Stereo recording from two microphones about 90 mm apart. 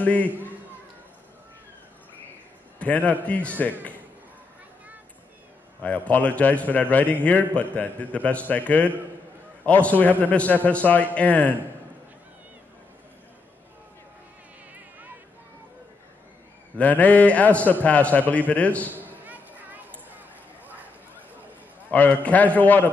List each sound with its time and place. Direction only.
0.0 s a man's voice: 15° left (ahead or behind)
2.8 s a man's voice: 15° left (ahead or behind)
5.8 s a man's voice: 15° left (ahead or behind)
14.7 s a sound: 20° right (ahead or behind)
16.7 s a man's voice: 15° left (ahead or behind)
18.9 s a sound: 20° right (ahead or behind)
21.9 s a man's voice: 20° left (ahead or behind)